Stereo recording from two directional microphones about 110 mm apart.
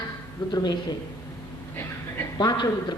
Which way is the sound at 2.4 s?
35° left (ahead or behind).